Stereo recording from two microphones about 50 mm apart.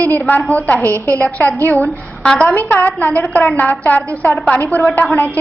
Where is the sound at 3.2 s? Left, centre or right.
Left.